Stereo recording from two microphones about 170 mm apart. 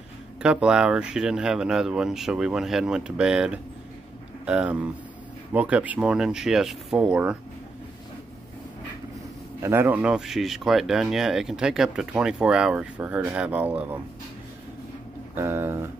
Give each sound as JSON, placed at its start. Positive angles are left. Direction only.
{"t": 0.4, "sound": "speech", "side_deg": -5}
{"t": 9.6, "sound": "speech", "side_deg": -15}
{"t": 15.3, "sound": "speech", "side_deg": -15}